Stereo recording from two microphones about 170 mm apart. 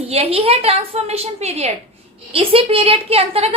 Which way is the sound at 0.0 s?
35° right (ahead or behind).